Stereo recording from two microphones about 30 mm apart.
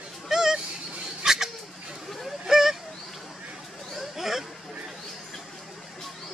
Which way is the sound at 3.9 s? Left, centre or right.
Centre.